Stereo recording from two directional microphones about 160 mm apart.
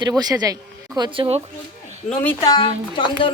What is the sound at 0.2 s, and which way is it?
Speech, 25° right (ahead or behind).